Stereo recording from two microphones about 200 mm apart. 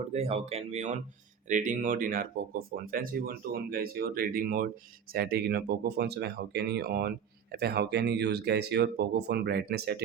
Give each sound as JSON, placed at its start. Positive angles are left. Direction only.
{"t": 0.1, "sound": "speech", "side_deg": -30}